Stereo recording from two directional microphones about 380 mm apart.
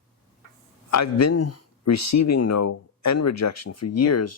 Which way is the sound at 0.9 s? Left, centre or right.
Left.